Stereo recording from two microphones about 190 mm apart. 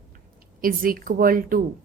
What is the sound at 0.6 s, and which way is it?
A woman's voice, 50° right (ahead or behind).